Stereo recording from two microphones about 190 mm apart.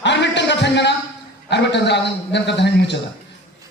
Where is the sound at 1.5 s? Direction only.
65° left (ahead or behind).